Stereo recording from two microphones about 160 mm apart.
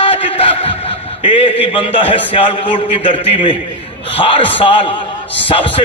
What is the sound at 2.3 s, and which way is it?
A man's voice, 30° left (ahead or behind).